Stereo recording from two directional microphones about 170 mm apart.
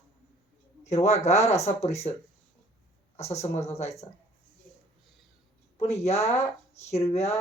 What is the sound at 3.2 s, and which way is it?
Speech, 40° left (ahead or behind).